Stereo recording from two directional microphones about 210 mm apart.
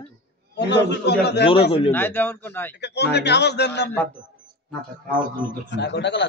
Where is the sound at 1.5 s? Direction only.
30° left (ahead or behind).